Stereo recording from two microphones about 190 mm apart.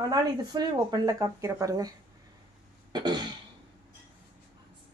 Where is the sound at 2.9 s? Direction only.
20° right (ahead or behind).